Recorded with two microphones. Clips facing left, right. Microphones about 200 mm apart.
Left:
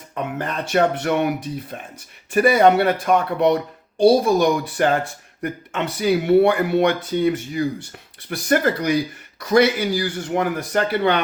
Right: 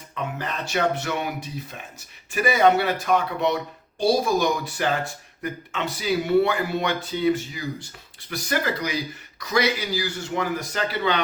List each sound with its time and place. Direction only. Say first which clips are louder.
0.1 s speech: left 4 dB; 50° left (ahead or behind)
2.3 s speech: left 5 dB; 55° left (ahead or behind)